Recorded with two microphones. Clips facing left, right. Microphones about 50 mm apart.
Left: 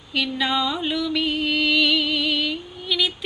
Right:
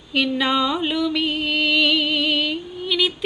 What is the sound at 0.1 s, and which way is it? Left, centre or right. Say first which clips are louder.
Speech: right 3 dB; right.